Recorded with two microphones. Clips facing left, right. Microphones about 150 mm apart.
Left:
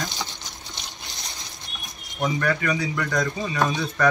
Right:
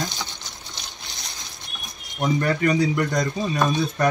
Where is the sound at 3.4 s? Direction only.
Centre (ahead or behind).